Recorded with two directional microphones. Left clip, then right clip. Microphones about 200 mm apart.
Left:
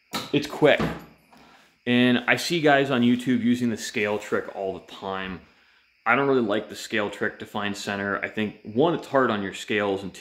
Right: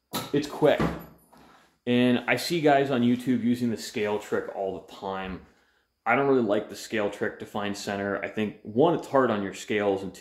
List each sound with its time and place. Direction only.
0.3 s speech: 40° left (ahead or behind)
1.9 s speech: 25° left (ahead or behind)